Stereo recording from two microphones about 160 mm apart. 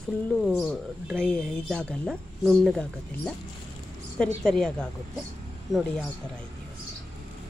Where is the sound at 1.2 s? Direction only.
5° left (ahead or behind).